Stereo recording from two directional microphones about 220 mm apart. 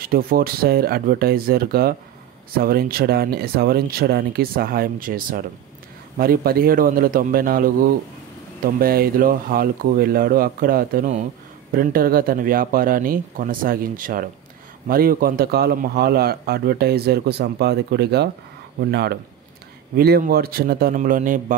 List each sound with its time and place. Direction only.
0.0 s a man's voice: 40° right (ahead or behind)
8.7 s a man's voice: 40° right (ahead or behind)